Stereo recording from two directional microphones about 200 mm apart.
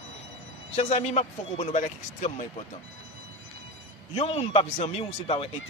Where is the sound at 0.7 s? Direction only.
35° left (ahead or behind).